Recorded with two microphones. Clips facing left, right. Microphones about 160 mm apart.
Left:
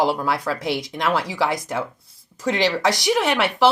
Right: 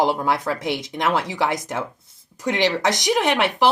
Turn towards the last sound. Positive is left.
turn(degrees=-15)  # may be behind; listen again after turning